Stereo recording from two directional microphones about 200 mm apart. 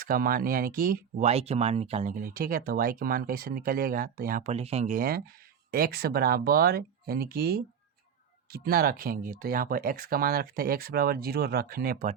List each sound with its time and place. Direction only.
0.0 s speech: 45° right (ahead or behind)
1.3 s speech: 30° right (ahead or behind)
4.5 s speech: 30° right (ahead or behind); by 12.1 s 45° right (ahead or behind)